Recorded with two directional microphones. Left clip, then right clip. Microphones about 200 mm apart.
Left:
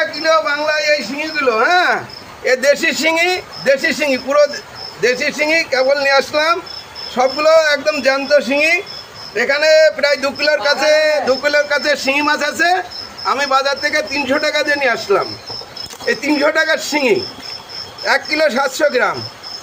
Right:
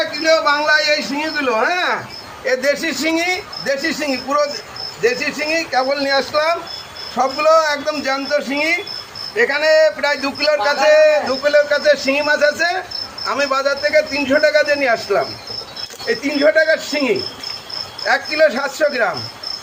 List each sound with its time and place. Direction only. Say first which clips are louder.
0.2 s a man's voice: right 1 dB; 10° left (ahead or behind)
1.4 s speech: left 4 dB; 35° left (ahead or behind)
1.6 s a man's voice: left 4 dB; 55° left (ahead or behind)
16.0 s a man's voice: even; 60° left (ahead or behind)